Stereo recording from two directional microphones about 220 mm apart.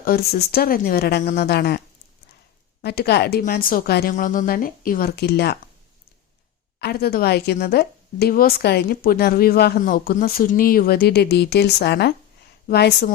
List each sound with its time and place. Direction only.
0.0 s a woman's voice: 45° left (ahead or behind)
2.8 s a woman's voice: 45° left (ahead or behind)
6.7 s a woman's voice: 45° left (ahead or behind)